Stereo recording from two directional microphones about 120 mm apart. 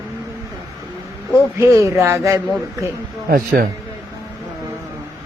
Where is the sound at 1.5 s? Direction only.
25° right (ahead or behind).